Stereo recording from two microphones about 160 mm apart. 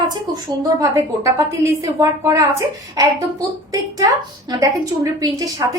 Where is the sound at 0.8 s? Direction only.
15° right (ahead or behind).